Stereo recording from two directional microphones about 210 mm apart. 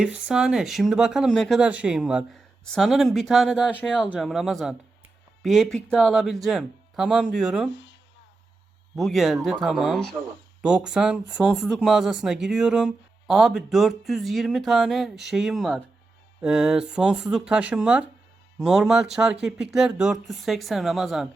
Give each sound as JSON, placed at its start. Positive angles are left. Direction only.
{"t": 0.0, "sound": "speech", "side_deg": -5}
{"t": 7.7, "sound": "speech", "side_deg": 60}
{"t": 9.0, "sound": "speech", "side_deg": 0}